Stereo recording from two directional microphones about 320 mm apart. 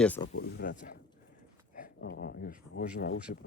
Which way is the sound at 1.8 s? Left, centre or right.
Left.